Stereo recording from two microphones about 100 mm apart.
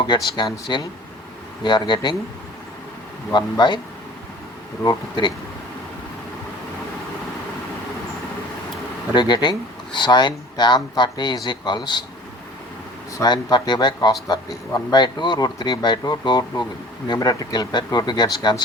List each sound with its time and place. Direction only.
0.1 s speech: 50° left (ahead or behind)
3.3 s speech: 50° left (ahead or behind)
4.8 s speech: 45° left (ahead or behind)
9.1 s speech: 50° left (ahead or behind)
13.2 s speech: 45° left (ahead or behind)